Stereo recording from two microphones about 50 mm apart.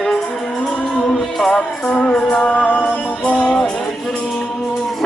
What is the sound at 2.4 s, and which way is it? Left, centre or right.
Music, left.